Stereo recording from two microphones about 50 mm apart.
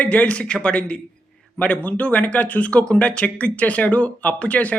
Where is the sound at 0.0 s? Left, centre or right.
Left.